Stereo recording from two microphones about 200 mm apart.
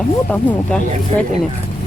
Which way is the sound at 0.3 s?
5° left (ahead or behind).